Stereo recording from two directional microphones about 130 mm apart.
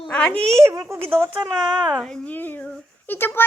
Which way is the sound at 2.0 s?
5° left (ahead or behind).